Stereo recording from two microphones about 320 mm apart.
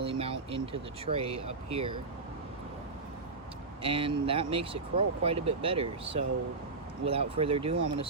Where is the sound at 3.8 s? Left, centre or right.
Centre.